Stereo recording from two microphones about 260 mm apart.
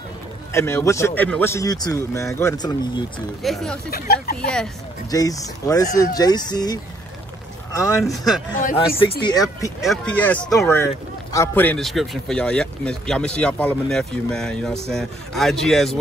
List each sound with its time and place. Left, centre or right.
0.5 s a man's voice: centre
3.4 s speech: centre
3.9 s speech: left
4.4 s a man's voice: centre
8.5 s a man's voice: left; by 16.0 s centre